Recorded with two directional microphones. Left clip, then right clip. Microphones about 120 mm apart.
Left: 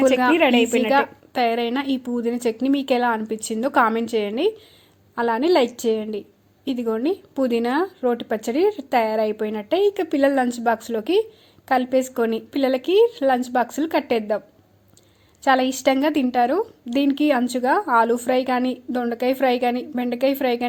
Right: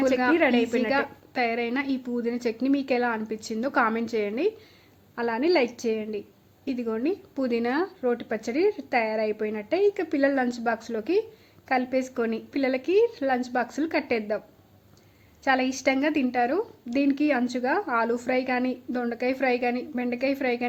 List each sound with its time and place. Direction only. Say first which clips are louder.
0.0 s a woman's voice: left 5 dB; 35° left (ahead or behind)
15.4 s a woman's voice: left 6 dB; 35° left (ahead or behind)